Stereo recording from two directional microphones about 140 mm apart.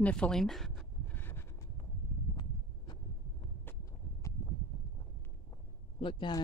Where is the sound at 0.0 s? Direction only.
10° left (ahead or behind).